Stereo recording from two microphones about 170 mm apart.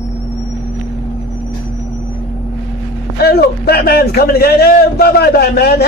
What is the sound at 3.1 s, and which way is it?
A man's voice, 70° left (ahead or behind).